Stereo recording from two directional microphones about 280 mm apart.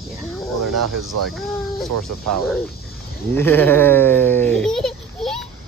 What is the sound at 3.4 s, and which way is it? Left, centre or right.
A child's voice, centre.